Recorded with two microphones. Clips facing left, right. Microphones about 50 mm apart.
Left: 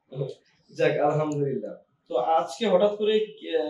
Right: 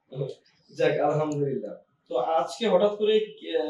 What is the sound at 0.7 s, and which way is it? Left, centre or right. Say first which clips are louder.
Speech: left 1 dB; centre.